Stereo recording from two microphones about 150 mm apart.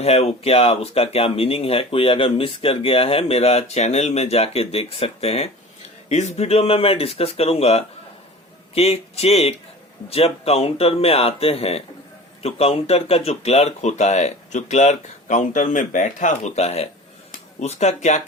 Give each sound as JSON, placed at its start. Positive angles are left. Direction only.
{"t": 0.0, "sound": "speech", "side_deg": 45}